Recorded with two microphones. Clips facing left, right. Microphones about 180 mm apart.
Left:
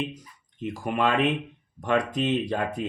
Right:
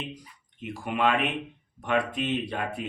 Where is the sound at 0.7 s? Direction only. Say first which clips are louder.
Left 1 dB; 40° left (ahead or behind).